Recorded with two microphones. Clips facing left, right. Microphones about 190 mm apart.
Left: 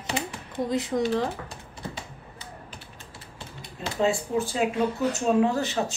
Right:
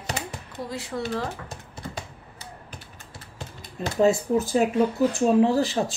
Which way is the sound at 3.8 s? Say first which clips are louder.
Right 5 dB; 40° right (ahead or behind).